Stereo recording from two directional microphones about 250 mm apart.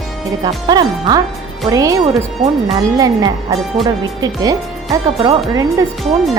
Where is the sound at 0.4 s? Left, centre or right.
Centre.